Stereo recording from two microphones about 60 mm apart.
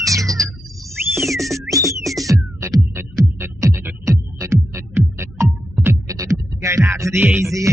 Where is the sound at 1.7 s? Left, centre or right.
Right.